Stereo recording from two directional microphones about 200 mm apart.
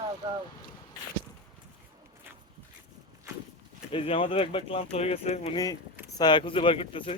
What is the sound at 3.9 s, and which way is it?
Speech, 25° left (ahead or behind).